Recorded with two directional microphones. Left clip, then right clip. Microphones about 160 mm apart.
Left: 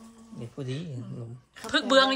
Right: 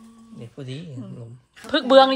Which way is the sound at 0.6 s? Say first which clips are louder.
Right 1 dB; 25° right (ahead or behind).